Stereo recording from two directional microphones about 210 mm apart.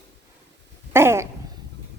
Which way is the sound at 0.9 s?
10° right (ahead or behind).